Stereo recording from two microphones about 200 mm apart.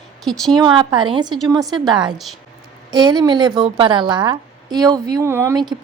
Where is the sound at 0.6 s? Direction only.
20° right (ahead or behind).